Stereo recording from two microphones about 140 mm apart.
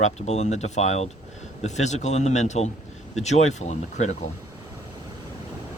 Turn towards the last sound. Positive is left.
turn(degrees=55)  # may be behind; listen again after turning